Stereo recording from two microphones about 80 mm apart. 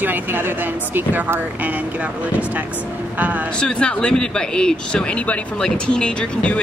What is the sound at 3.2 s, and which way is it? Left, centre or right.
Speech, centre.